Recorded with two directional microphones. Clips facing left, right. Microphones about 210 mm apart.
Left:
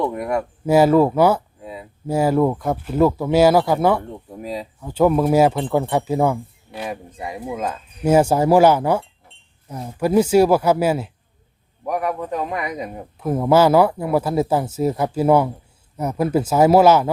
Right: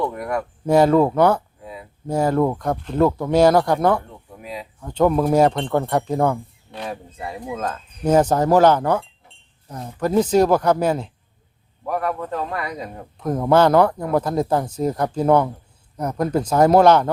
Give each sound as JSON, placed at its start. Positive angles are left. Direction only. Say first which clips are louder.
{"t": 0.0, "sound": "speech", "louder": "left 2 dB", "side_deg": 20}
{"t": 0.6, "sound": "speech", "louder": "left 1 dB", "side_deg": 5}
{"t": 1.6, "sound": "a sound", "louder": "left 2 dB", "side_deg": 25}
{"t": 2.0, "sound": "speech", "louder": "left 2 dB", "side_deg": 5}
{"t": 4.3, "sound": "speech", "louder": "left 5 dB", "side_deg": 35}
{"t": 4.8, "sound": "speech", "louder": "left 1 dB", "side_deg": 5}
{"t": 13.1, "sound": "speech", "louder": "left 1 dB", "side_deg": 5}